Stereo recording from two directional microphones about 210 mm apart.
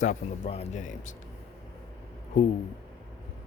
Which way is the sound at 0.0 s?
35° left (ahead or behind).